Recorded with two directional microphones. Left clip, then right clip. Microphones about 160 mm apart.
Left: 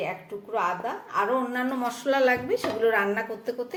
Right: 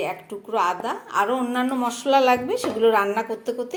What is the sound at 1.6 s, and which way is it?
A woman's voice, 30° right (ahead or behind).